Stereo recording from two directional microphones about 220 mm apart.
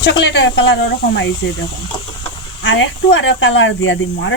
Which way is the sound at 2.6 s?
60° left (ahead or behind).